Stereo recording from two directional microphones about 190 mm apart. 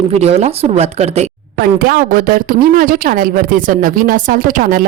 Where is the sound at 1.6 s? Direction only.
50° right (ahead or behind).